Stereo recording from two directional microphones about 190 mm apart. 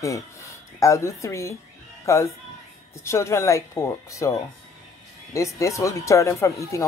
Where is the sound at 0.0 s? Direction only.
15° left (ahead or behind).